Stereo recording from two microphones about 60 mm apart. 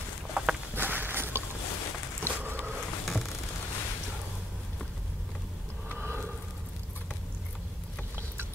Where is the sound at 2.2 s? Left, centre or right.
Right.